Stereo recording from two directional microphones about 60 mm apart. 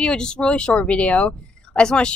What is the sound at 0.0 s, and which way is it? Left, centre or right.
Speech, centre.